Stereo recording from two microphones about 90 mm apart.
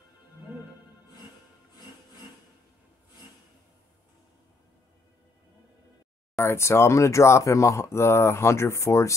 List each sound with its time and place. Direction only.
6.3 s speech: 30° left (ahead or behind)